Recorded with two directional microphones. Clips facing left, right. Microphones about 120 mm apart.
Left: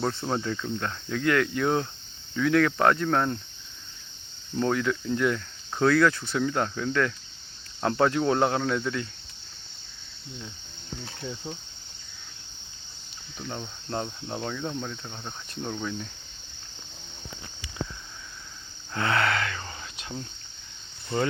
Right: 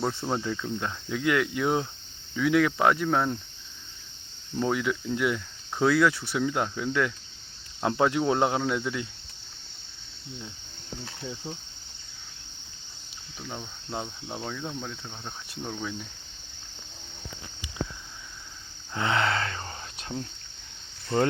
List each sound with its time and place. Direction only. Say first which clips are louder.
0.0 s speech: left 1 dB; 10° right (ahead or behind)
4.5 s speech: left 1 dB; 10° right (ahead or behind)
11.2 s speech: left 1 dB; 5° right (ahead or behind)
13.4 s speech: left 2 dB; centre (ahead or behind)
18.9 s speech: left 1 dB; 20° right (ahead or behind)